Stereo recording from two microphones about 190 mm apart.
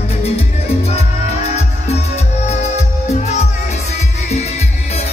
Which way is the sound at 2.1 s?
35° left (ahead or behind).